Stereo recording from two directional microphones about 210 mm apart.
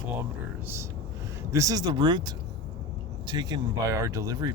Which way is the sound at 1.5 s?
15° right (ahead or behind).